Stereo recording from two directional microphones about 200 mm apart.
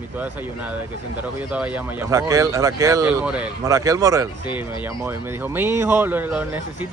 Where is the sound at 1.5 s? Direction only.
5° right (ahead or behind).